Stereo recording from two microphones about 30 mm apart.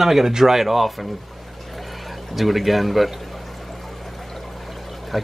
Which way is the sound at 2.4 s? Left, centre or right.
Centre.